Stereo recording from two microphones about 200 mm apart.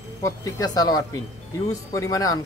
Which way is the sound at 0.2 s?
20° left (ahead or behind).